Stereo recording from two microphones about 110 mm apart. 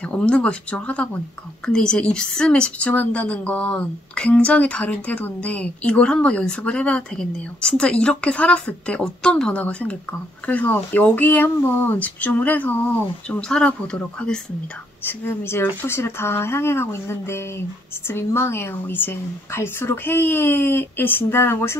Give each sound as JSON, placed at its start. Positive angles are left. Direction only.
{"t": 0.1, "sound": "a woman's voice", "side_deg": 10}
{"t": 15.0, "sound": "a woman's voice", "side_deg": 20}